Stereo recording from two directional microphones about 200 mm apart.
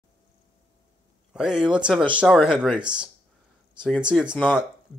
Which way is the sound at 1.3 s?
5° right (ahead or behind).